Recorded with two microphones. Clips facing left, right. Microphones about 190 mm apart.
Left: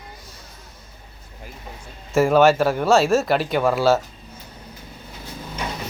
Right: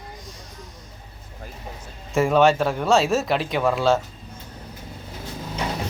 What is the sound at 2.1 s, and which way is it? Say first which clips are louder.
Speech: left 2 dB; centre (ahead or behind).